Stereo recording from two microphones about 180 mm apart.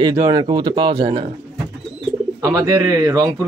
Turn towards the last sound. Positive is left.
turn(degrees=-20)  # may be behind; listen again after turning